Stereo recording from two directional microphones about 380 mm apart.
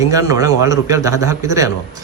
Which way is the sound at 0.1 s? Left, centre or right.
Centre.